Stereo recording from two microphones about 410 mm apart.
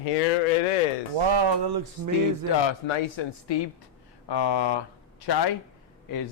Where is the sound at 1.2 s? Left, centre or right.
Right.